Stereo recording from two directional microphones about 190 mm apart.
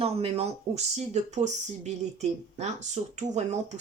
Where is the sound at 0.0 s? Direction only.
30° right (ahead or behind).